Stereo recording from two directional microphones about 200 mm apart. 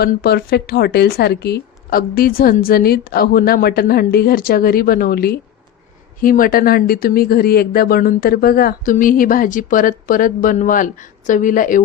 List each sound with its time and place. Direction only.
0.0 s speech: 50° left (ahead or behind)